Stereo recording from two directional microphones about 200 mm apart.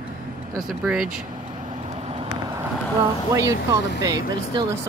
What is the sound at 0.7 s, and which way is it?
Speech, centre (ahead or behind).